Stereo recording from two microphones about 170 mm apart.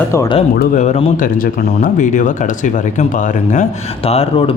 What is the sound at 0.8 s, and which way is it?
Speech, 45° left (ahead or behind).